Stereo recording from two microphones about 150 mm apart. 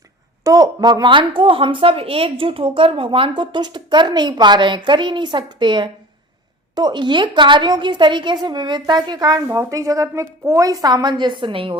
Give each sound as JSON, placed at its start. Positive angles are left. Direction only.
{"t": 0.4, "sound": "a woman's voice", "side_deg": -25}